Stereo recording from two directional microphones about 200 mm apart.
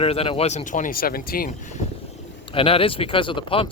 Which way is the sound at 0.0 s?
30° left (ahead or behind).